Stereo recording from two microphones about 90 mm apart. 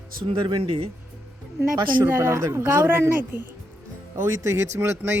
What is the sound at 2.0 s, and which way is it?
A woman's voice, 30° right (ahead or behind).